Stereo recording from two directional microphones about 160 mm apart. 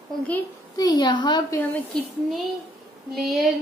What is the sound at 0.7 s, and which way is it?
Speech, 25° left (ahead or behind).